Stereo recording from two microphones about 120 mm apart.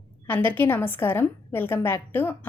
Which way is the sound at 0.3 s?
15° left (ahead or behind).